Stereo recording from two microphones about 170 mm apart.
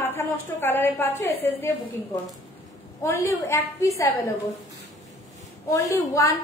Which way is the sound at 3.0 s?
15° left (ahead or behind).